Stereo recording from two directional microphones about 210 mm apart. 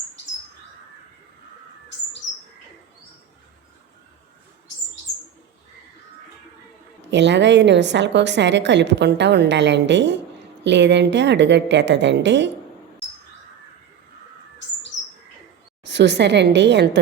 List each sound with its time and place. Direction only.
7.1 s a woman's voice: 55° right (ahead or behind)
15.8 s a woman's voice: 55° right (ahead or behind)